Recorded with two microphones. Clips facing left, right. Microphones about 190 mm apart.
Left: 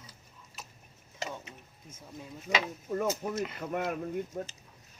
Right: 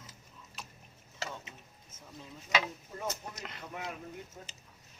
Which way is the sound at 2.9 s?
55° left (ahead or behind).